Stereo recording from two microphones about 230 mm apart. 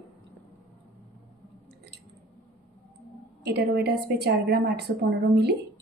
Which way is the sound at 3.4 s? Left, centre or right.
Right.